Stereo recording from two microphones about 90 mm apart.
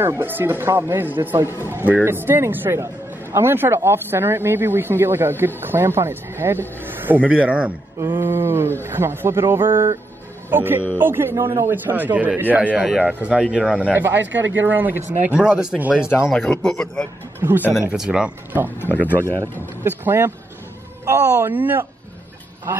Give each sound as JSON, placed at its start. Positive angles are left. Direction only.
{"t": 0.0, "sound": "a man's voice", "side_deg": -25}
{"t": 8.2, "sound": "a man's voice", "side_deg": -25}
{"t": 12.7, "sound": "speech", "side_deg": -5}
{"t": 13.0, "sound": "speech", "side_deg": -15}
{"t": 14.0, "sound": "a man's voice", "side_deg": -25}
{"t": 16.4, "sound": "speech", "side_deg": 10}
{"t": 17.4, "sound": "speech", "side_deg": -20}
{"t": 17.7, "sound": "speech", "side_deg": -5}
{"t": 18.8, "sound": "speech", "side_deg": 20}
{"t": 19.8, "sound": "a man's voice", "side_deg": -25}